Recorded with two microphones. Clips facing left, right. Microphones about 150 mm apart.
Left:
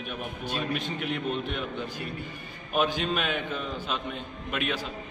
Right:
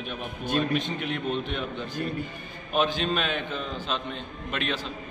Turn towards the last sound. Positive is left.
turn(degrees=10)  # may be behind; listen again after turning